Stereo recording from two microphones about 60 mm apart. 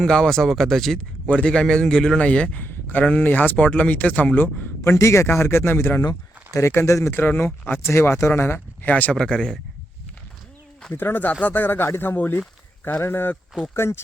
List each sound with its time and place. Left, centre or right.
0.0 s a man's voice: centre
1.3 s a man's voice: centre
4.8 s speech: left
7.1 s speech: left
7.9 s speech: left
9.1 s a man's voice: centre
10.9 s speech: left